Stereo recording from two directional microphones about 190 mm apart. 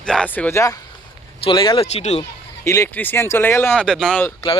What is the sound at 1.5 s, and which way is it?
Speech, 25° left (ahead or behind).